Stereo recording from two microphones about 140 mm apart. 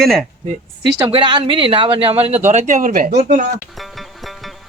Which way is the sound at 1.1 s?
35° right (ahead or behind).